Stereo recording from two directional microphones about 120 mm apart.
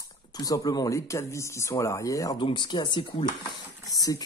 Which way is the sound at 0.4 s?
30° left (ahead or behind).